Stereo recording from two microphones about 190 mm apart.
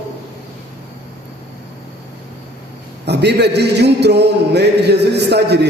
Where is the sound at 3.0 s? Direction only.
60° right (ahead or behind).